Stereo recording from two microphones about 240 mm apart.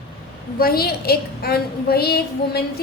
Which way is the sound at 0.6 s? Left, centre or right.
Left.